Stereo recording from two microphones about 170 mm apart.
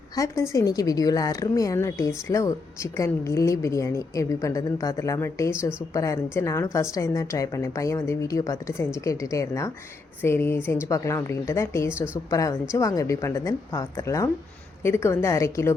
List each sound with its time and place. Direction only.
0.2 s a woman's voice: 20° left (ahead or behind)